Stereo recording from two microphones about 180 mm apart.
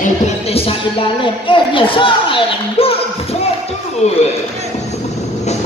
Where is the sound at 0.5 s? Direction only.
30° left (ahead or behind).